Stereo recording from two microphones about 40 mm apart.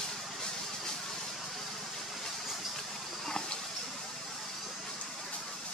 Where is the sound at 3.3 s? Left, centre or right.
Centre.